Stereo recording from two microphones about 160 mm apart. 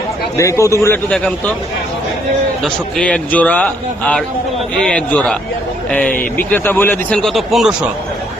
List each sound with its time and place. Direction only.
0.3 s a man's voice: 20° left (ahead or behind)
1.1 s speech: 10° left (ahead or behind)
2.6 s speech: 5° left (ahead or behind)